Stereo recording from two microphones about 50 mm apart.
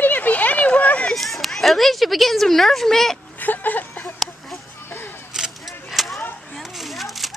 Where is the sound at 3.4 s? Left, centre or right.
Left.